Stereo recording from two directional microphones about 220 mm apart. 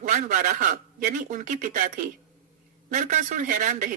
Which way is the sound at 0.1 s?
40° right (ahead or behind).